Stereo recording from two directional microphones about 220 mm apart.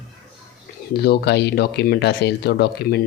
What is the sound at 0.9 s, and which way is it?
Speech, 50° left (ahead or behind).